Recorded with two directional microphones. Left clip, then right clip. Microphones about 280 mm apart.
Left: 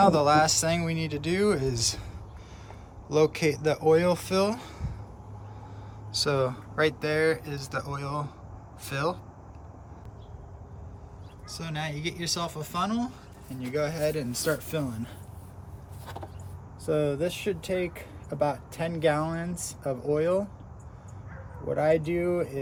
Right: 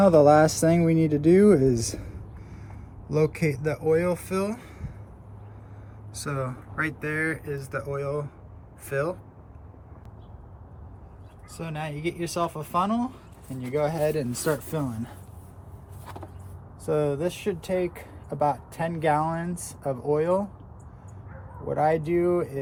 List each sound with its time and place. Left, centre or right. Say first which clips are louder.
0.2 s speech: right 5 dB; centre
3.1 s speech: left 1 dB; centre
6.1 s speech: left 6 dB; centre
11.5 s speech: right 1 dB; centre
16.0 s vehicle: left 1 dB; centre
16.8 s speech: right 1 dB; centre
21.7 s speech: right 1 dB; centre